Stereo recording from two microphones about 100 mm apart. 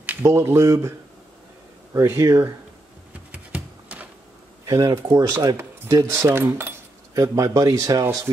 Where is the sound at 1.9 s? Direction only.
30° right (ahead or behind).